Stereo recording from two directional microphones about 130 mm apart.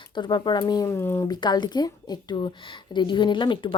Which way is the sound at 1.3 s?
35° left (ahead or behind).